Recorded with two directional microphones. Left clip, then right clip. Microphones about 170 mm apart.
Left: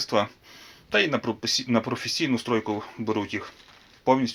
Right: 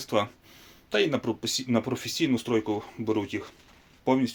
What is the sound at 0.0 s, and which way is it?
Speech, 10° right (ahead or behind).